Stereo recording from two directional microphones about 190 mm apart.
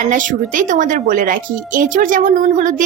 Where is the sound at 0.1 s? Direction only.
45° right (ahead or behind).